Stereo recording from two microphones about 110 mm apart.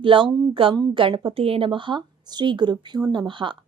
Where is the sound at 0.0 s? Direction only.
50° right (ahead or behind).